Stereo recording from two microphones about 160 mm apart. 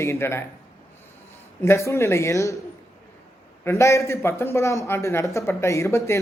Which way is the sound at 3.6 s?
15° left (ahead or behind).